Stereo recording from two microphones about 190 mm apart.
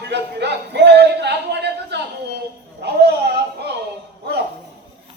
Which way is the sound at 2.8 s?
60° right (ahead or behind).